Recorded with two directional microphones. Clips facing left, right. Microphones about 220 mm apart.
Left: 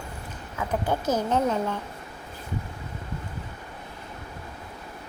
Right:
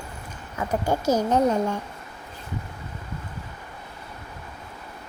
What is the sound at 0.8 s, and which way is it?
Speech, 10° right (ahead or behind).